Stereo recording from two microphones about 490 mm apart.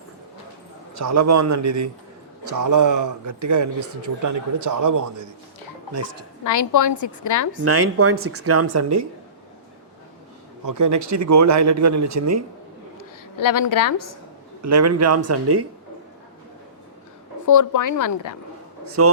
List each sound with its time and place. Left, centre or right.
0.9 s speech: right
6.4 s a woman's voice: left
7.6 s speech: right
10.7 s speech: right
13.0 s a woman's voice: left
14.6 s speech: right
17.4 s a woman's voice: left
19.0 s speech: right